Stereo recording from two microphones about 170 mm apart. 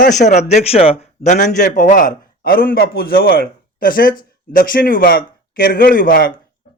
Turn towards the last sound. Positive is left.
turn(degrees=60)  # may be behind; listen again after turning